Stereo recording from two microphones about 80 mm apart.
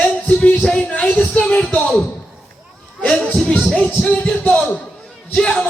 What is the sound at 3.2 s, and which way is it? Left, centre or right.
Speech, centre.